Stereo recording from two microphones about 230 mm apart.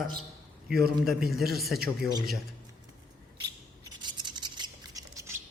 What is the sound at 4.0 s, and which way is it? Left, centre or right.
Rub, centre.